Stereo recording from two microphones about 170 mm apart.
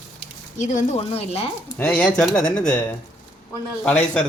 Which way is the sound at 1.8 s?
5° left (ahead or behind).